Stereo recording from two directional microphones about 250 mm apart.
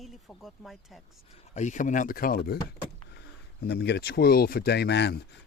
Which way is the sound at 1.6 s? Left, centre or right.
Left.